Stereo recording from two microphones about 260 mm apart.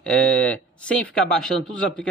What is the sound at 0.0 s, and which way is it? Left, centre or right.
Speech, centre.